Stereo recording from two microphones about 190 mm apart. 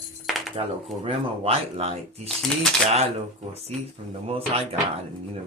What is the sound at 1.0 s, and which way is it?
Speech, 30° right (ahead or behind).